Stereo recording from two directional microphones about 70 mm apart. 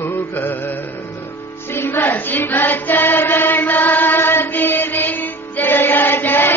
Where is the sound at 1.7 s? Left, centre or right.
Left.